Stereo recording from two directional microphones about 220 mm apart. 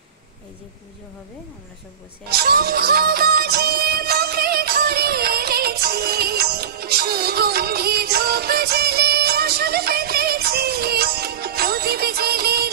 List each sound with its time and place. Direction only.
2.2 s music: 45° right (ahead or behind)